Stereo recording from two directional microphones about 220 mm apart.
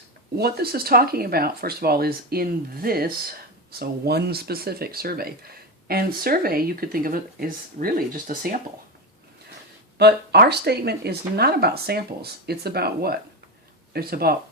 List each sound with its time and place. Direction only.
0.3 s speech: 45° right (ahead or behind)
10.0 s speech: 50° right (ahead or behind)